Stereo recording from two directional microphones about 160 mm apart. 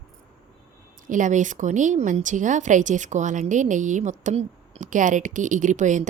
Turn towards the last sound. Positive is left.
turn(degrees=-50)  # may be behind; listen again after turning